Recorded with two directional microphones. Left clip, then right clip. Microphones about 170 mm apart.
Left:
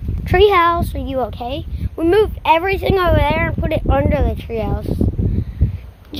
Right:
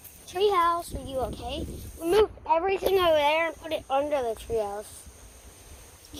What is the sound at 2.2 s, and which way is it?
Speech, 45° left (ahead or behind).